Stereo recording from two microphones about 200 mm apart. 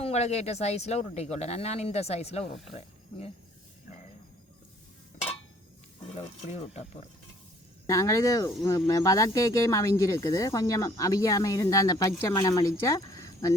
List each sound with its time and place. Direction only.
0.0 s speech: 30° left (ahead or behind)
2.4 s speech: centre (ahead or behind)
2.7 s speech: 30° left (ahead or behind)
6.1 s speech: 30° left (ahead or behind)
7.9 s speech: 15° left (ahead or behind)